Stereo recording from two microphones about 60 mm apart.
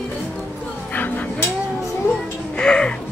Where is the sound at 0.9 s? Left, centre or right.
Left.